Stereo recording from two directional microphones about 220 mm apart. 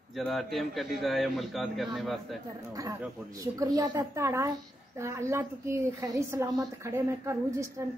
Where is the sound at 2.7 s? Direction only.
15° right (ahead or behind).